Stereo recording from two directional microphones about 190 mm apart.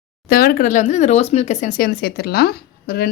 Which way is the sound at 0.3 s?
50° left (ahead or behind).